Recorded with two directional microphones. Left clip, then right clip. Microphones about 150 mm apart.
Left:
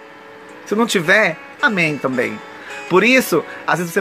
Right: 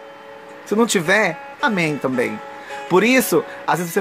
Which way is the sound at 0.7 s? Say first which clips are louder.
Left 2 dB; 20° right (ahead or behind).